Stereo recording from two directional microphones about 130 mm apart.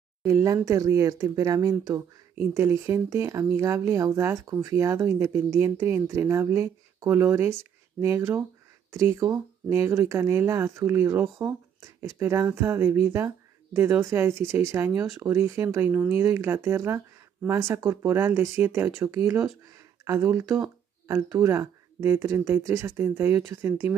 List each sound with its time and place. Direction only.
0.2 s speech: 25° right (ahead or behind)